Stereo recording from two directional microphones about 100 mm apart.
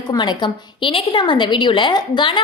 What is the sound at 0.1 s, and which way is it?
A woman's voice, 45° left (ahead or behind).